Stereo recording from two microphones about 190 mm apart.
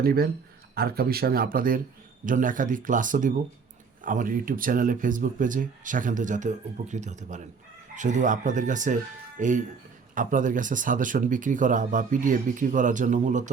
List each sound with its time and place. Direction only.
0.0 s speech: 50° right (ahead or behind)